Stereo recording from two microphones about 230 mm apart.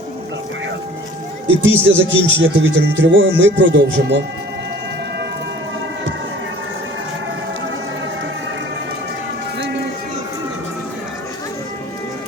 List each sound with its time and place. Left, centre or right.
1.6 s speech: right